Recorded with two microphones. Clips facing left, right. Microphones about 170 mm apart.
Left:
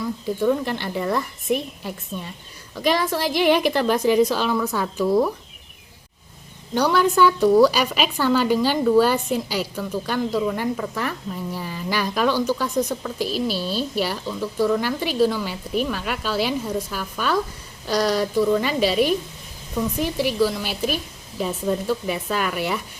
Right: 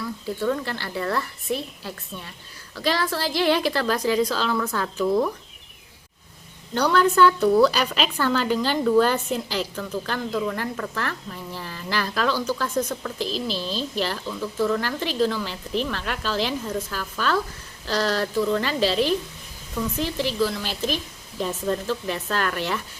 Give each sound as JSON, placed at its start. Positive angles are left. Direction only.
{"t": 0.0, "sound": "a woman's voice", "side_deg": 15}
{"t": 6.7, "sound": "a woman's voice", "side_deg": 10}